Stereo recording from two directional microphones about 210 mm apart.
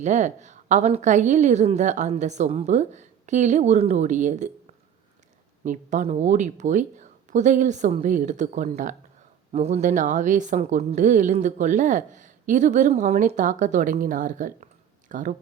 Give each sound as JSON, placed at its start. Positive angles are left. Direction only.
{"t": 0.0, "sound": "a woman's voice", "side_deg": -35}